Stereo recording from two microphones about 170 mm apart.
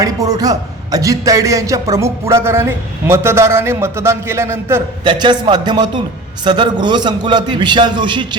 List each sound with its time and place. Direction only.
0.0 s a man's voice: 20° right (ahead or behind)
5.0 s a man's voice: 25° right (ahead or behind)